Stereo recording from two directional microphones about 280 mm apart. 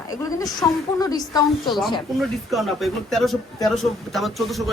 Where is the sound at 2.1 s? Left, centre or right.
Centre.